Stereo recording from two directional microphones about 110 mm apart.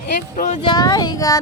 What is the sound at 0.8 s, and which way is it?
Speech, 35° left (ahead or behind).